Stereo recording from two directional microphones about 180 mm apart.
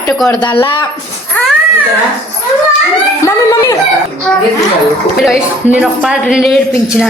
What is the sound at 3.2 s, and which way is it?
Speech, 15° left (ahead or behind).